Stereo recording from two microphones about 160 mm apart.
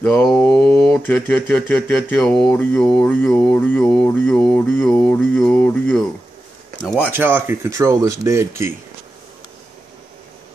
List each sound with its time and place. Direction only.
0.0 s speech: 5° left (ahead or behind)
6.8 s speech: 5° right (ahead or behind)